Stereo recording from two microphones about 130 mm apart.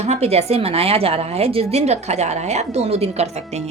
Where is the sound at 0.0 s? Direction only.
55° right (ahead or behind).